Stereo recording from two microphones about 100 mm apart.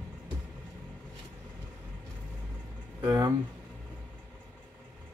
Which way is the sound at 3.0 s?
35° right (ahead or behind).